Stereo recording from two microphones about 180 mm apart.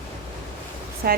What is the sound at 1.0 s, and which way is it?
Speech, 60° right (ahead or behind).